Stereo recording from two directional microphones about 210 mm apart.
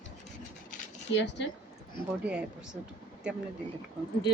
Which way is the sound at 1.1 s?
55° left (ahead or behind).